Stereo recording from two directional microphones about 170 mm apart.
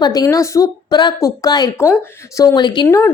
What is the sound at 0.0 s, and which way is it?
A woman's voice, 20° left (ahead or behind).